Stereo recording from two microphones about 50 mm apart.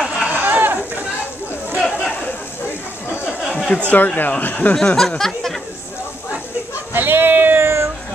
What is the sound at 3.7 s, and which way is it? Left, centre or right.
Speech, left.